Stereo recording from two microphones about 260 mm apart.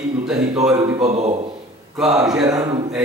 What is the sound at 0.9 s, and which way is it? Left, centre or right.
Speech, right.